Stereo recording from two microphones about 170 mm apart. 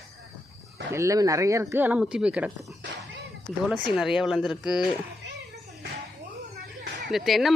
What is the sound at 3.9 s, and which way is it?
Speech, centre (ahead or behind).